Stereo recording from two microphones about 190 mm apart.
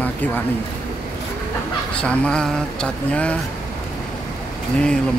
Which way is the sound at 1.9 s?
5° left (ahead or behind).